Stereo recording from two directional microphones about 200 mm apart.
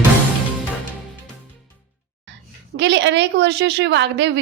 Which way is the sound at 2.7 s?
60° right (ahead or behind).